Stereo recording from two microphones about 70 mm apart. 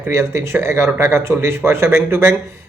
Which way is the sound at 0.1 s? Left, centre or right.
Right.